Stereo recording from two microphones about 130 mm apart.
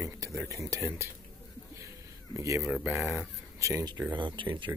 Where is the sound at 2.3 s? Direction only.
25° right (ahead or behind).